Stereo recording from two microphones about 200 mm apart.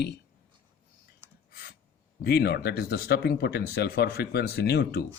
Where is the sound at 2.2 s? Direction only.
50° left (ahead or behind).